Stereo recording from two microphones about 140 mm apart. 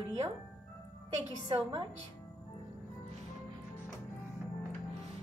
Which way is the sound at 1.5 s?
35° right (ahead or behind).